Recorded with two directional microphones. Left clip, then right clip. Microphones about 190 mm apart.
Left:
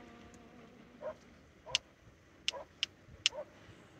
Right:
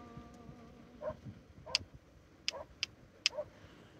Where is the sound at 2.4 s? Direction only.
30° left (ahead or behind).